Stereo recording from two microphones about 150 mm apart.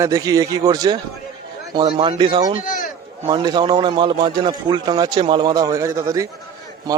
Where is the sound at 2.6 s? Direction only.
65° left (ahead or behind).